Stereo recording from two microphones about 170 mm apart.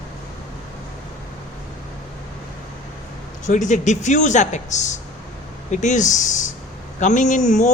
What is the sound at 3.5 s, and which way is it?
Speech, 45° left (ahead or behind).